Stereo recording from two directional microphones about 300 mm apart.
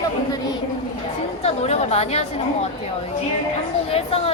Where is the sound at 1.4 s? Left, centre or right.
Left.